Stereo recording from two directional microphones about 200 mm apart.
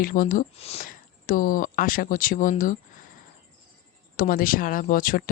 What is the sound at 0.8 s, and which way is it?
Speech, 45° left (ahead or behind).